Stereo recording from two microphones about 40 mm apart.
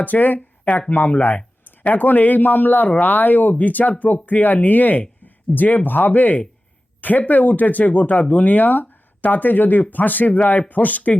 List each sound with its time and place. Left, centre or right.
0.0 s speech: left